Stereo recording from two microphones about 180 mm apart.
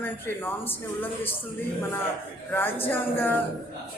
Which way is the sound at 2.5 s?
10° left (ahead or behind).